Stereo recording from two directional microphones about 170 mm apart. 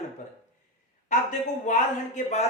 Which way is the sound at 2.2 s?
45° left (ahead or behind).